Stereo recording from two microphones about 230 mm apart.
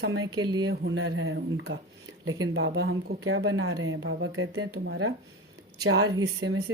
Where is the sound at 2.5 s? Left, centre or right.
Right.